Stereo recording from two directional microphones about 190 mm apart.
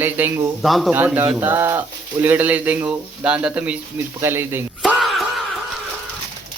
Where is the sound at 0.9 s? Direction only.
10° right (ahead or behind).